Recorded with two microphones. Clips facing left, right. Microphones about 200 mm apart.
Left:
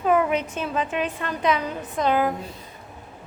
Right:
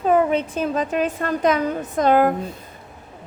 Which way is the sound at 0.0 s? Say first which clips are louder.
Right 3 dB; 35° right (ahead or behind).